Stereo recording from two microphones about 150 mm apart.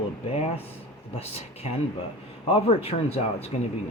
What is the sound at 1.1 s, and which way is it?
Speech, 45° left (ahead or behind).